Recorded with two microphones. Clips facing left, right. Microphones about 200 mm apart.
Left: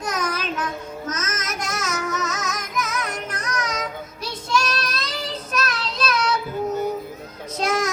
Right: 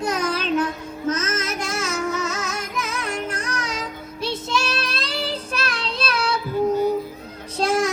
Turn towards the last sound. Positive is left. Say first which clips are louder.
# right 2 dB
turn(degrees=-30)  # may be behind; listen again after turning